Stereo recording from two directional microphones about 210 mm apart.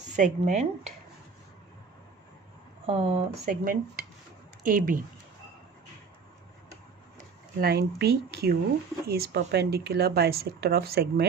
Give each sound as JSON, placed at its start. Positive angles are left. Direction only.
{"t": 0.0, "sound": "speech", "side_deg": -35}
{"t": 2.8, "sound": "speech", "side_deg": -30}
{"t": 7.6, "sound": "speech", "side_deg": -50}